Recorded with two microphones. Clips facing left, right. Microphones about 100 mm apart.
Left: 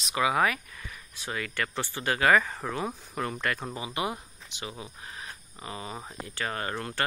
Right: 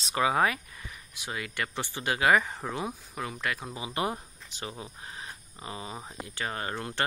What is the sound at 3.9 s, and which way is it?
Speech, 35° right (ahead or behind).